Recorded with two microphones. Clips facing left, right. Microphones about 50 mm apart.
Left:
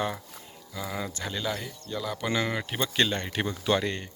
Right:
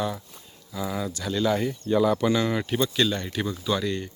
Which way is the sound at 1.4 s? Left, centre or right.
Centre.